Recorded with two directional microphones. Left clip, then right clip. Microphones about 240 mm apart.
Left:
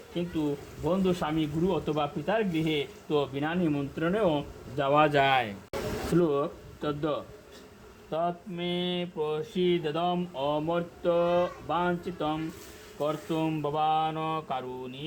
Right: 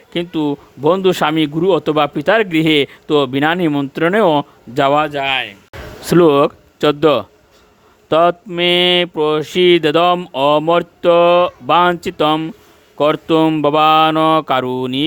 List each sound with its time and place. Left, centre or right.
0.1 s speech: right
5.2 s speech: centre
6.1 s speech: right